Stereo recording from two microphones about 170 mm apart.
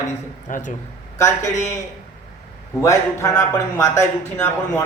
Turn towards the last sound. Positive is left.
turn(degrees=15)  # may be behind; listen again after turning